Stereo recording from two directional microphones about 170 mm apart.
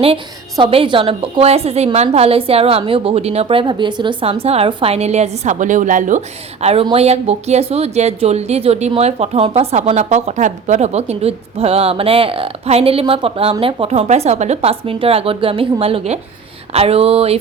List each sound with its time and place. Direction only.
0.5 s speech: 30° right (ahead or behind)